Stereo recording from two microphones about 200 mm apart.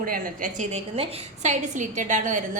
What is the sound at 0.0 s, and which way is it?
A woman's voice, 45° right (ahead or behind).